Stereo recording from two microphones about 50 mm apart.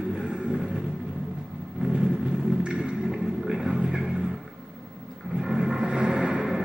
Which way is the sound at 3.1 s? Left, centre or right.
Centre.